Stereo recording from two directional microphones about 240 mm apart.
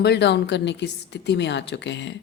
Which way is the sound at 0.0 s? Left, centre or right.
Left.